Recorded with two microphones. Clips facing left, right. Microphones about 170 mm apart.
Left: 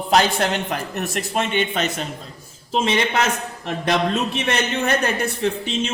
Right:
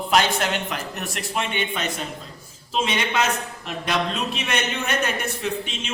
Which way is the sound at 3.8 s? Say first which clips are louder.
Left 5 dB; 40° left (ahead or behind).